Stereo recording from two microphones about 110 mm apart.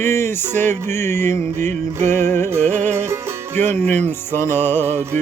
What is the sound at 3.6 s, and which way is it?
Music, 20° left (ahead or behind).